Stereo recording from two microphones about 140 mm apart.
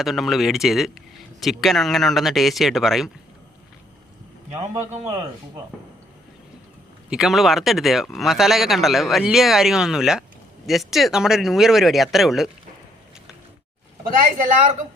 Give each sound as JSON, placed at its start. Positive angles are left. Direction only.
{"t": 0.0, "sound": "speech", "side_deg": 0}
{"t": 4.9, "sound": "speech", "side_deg": -55}
{"t": 7.1, "sound": "speech", "side_deg": -5}
{"t": 14.2, "sound": "speech", "side_deg": -70}